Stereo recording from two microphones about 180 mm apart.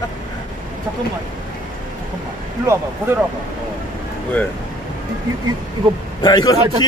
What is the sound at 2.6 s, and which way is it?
Speech, 15° right (ahead or behind).